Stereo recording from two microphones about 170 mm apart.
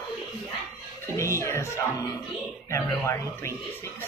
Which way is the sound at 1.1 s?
15° left (ahead or behind).